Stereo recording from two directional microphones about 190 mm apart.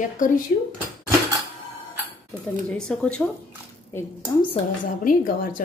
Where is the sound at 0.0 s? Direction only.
45° left (ahead or behind).